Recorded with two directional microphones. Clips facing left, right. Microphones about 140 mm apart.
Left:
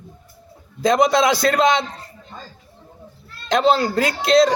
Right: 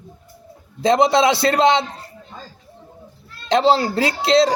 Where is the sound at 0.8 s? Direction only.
25° right (ahead or behind).